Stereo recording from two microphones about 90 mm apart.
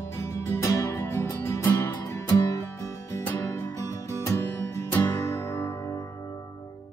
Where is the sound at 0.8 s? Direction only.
30° left (ahead or behind).